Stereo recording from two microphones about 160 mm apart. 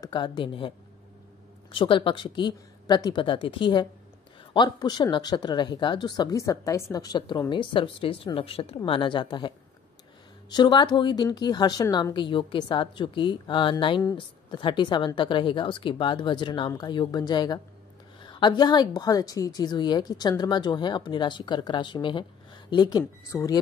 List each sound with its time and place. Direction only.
0.0 s a woman's voice: 30° left (ahead or behind)
10.5 s a woman's voice: 25° left (ahead or behind)